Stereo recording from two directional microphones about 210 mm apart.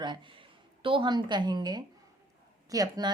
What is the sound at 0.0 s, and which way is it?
Speech, 20° right (ahead or behind).